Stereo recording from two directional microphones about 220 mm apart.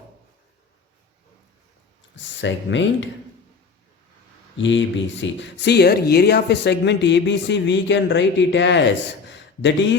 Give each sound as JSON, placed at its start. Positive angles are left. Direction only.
{"t": 2.1, "sound": "speech", "side_deg": 55}
{"t": 4.5, "sound": "speech", "side_deg": 55}
{"t": 9.2, "sound": "a sound", "side_deg": 55}